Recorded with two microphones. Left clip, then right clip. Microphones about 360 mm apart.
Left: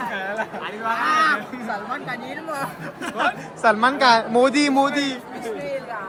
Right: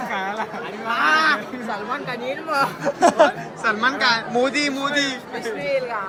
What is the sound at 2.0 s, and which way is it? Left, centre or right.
Speech, centre.